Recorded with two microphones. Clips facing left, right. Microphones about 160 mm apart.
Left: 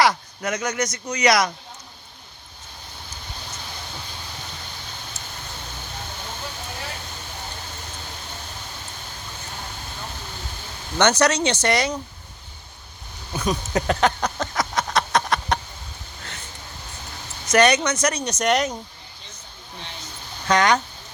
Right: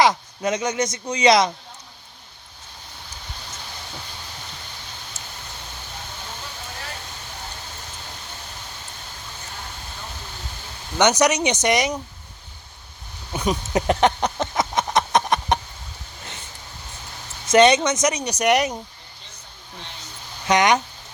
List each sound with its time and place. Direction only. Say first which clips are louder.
0.0 s speech: right 2 dB; 20° right (ahead or behind)
10.9 s speech: right 1 dB; 15° right (ahead or behind)
13.3 s a sound: right 1 dB; 20° right (ahead or behind)
17.5 s speech: right 3 dB; 25° right (ahead or behind)
20.5 s speech: right 1 dB; 20° right (ahead or behind)